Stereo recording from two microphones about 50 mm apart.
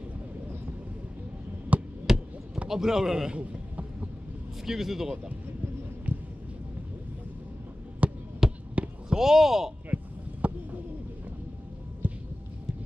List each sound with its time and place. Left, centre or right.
1.7 s hum: right
2.1 s basketball bounce: centre
2.7 s speech: centre
3.3 s a sound: right
4.6 s speech: centre
6.1 s a sound: right
8.0 s basketball bounce: right
8.4 s basketball bounce: centre
8.7 s basketball bounce: right
9.2 s speech: centre
9.9 s a sound: right